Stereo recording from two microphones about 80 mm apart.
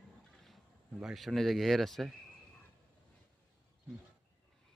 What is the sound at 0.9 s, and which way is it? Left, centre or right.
A man's voice, centre.